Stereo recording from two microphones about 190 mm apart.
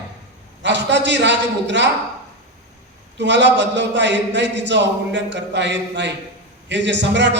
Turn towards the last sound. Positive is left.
turn(degrees=-70)  # may be behind; listen again after turning